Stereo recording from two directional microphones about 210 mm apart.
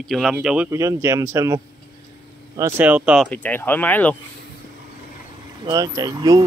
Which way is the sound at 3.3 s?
10° left (ahead or behind).